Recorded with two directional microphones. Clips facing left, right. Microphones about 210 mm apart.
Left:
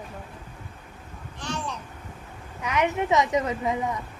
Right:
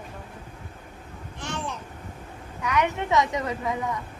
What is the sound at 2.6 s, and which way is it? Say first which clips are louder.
A woman's voice: left 1 dB; 20° left (ahead or behind).